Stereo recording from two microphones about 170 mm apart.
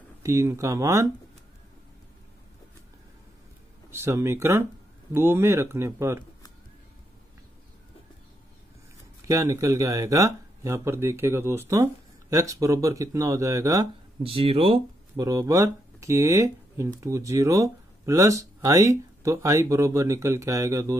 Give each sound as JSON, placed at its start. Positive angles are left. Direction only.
{"t": 0.2, "sound": "speech", "side_deg": -20}
{"t": 3.9, "sound": "speech", "side_deg": -15}
{"t": 9.2, "sound": "speech", "side_deg": -20}
{"t": 14.2, "sound": "speech", "side_deg": -35}
{"t": 15.2, "sound": "speech", "side_deg": -20}